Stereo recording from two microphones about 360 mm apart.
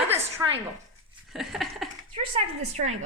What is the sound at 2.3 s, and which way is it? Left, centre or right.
Speech, centre.